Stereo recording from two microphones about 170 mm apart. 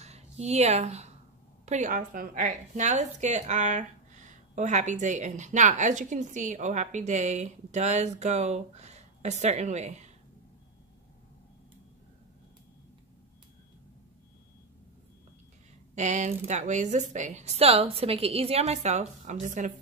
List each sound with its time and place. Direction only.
0.0 s a woman's voice: 40° right (ahead or behind)
15.9 s a woman's voice: 45° right (ahead or behind)